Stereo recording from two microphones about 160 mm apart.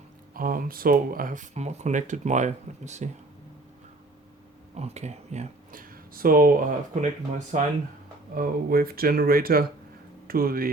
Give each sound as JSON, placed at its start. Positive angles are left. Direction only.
{"t": 0.3, "sound": "speech", "side_deg": -60}
{"t": 4.7, "sound": "speech", "side_deg": -45}
{"t": 5.7, "sound": "speech", "side_deg": -60}
{"t": 8.4, "sound": "speech", "side_deg": -65}